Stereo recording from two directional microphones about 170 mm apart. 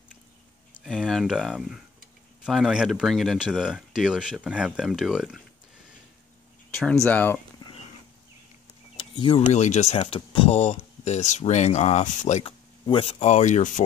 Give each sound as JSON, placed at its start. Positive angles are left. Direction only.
{"t": 0.7, "sound": "speech", "side_deg": 0}
{"t": 6.7, "sound": "speech", "side_deg": 5}
{"t": 8.9, "sound": "a sound", "side_deg": 30}
{"t": 9.5, "sound": "speech", "side_deg": 45}